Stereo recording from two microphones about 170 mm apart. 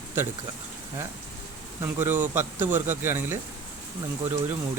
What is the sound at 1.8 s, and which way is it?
Speech, 15° right (ahead or behind).